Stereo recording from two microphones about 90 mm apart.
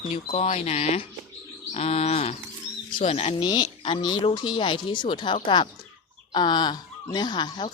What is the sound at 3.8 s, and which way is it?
Speech, 70° left (ahead or behind).